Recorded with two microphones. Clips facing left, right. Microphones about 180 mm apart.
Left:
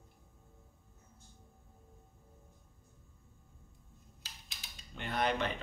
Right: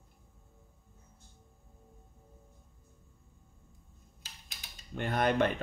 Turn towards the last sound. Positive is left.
turn(degrees=-50)  # may be behind; listen again after turning